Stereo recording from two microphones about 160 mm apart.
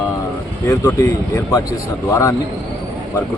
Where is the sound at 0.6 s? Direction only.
20° left (ahead or behind).